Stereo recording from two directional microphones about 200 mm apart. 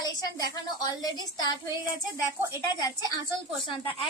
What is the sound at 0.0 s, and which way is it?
A woman's voice, 20° left (ahead or behind).